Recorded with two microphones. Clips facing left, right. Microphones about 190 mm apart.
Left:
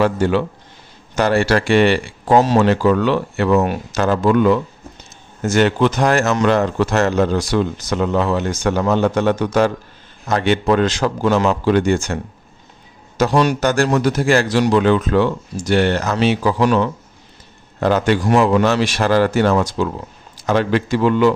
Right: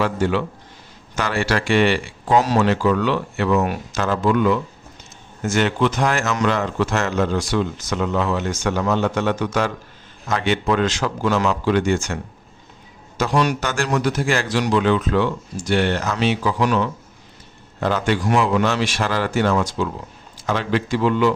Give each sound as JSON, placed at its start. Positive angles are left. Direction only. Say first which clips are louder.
{"t": 0.0, "sound": "a man's voice", "louder": "left 4 dB", "side_deg": 40}
{"t": 17.7, "sound": "a man's voice", "louder": "left 5 dB", "side_deg": 45}
{"t": 20.3, "sound": "a man's voice", "louder": "left 5 dB", "side_deg": 50}